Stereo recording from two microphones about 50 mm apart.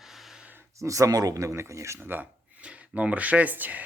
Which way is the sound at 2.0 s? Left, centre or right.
Right.